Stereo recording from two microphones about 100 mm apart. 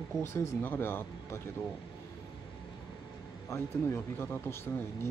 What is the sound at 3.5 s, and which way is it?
Speech, 25° left (ahead or behind).